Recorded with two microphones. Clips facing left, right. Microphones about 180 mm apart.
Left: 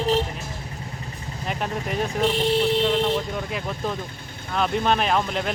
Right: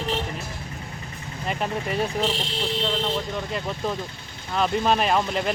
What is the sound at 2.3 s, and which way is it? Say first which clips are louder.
Speech: left 10 dB; 55° left (ahead or behind).